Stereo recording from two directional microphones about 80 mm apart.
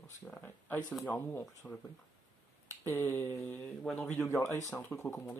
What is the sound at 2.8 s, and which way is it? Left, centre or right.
Speech, left.